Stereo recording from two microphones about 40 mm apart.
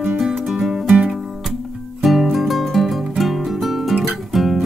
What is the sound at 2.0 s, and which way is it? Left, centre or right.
Music, centre.